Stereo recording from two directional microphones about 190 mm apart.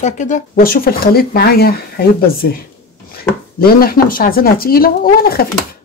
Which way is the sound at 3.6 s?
50° left (ahead or behind).